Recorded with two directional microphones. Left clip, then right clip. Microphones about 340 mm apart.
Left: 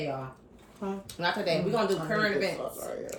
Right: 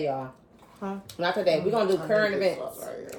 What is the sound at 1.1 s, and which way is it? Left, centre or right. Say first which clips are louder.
Speech: right 5 dB; centre.